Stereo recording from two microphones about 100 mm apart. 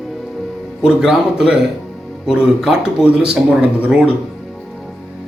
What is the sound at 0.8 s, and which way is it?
Speech, 5° right (ahead or behind).